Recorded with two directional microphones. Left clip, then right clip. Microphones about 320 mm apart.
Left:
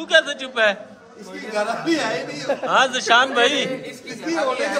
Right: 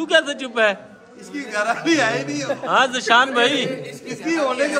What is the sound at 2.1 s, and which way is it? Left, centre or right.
Speech, centre.